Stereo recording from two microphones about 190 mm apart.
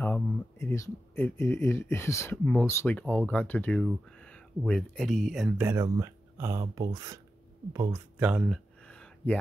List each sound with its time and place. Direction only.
0.0 s speech: 10° left (ahead or behind)
5.6 s speech: 15° right (ahead or behind)
8.8 s a sound: 5° left (ahead or behind)